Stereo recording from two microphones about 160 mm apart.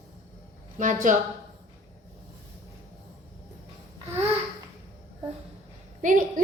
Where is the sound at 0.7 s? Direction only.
55° right (ahead or behind).